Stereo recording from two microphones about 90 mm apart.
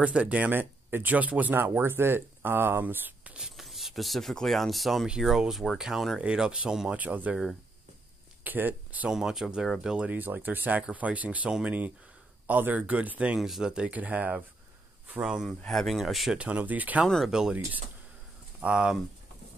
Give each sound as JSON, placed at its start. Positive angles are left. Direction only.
{"t": 0.0, "sound": "speech", "side_deg": -15}
{"t": 3.3, "sound": "speech", "side_deg": -5}
{"t": 8.5, "sound": "speech", "side_deg": -20}
{"t": 9.1, "sound": "speech", "side_deg": -5}
{"t": 13.4, "sound": "speech", "side_deg": -5}
{"t": 15.2, "sound": "speech", "side_deg": -5}
{"t": 16.3, "sound": "speech", "side_deg": -15}
{"t": 17.3, "sound": "speech", "side_deg": -5}
{"t": 18.6, "sound": "speech", "side_deg": -10}